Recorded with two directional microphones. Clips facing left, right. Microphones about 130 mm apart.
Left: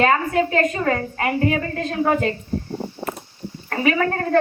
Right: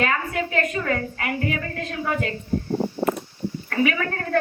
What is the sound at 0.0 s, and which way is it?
A woman's voice, 35° left (ahead or behind).